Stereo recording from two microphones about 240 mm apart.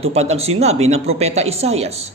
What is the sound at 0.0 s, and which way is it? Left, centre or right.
A man's voice, right.